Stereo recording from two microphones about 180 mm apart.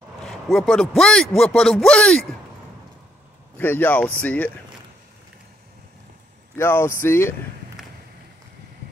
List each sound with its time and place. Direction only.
0.2 s a man's voice: centre (ahead or behind)
3.5 s speech: 10° left (ahead or behind)
6.5 s speech: 15° left (ahead or behind)